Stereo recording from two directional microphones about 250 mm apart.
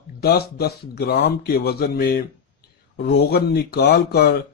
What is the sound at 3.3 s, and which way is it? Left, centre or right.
A man's voice, left.